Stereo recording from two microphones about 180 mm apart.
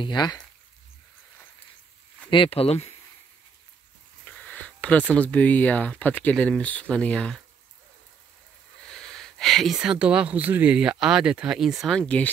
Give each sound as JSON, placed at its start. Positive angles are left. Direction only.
{"t": 0.0, "sound": "speech", "side_deg": 25}
{"t": 2.3, "sound": "speech", "side_deg": 30}
{"t": 4.2, "sound": "a sound", "side_deg": 5}
{"t": 5.1, "sound": "speech", "side_deg": 10}
{"t": 8.8, "sound": "speech", "side_deg": 5}